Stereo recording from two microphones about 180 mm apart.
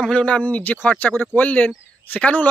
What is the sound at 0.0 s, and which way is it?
Speech, 5° left (ahead or behind).